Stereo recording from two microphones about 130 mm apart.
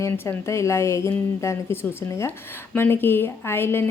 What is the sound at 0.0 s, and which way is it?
A woman's voice, 20° left (ahead or behind).